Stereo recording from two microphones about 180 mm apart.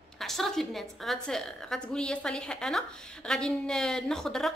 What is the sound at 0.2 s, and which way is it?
A woman's voice, centre (ahead or behind).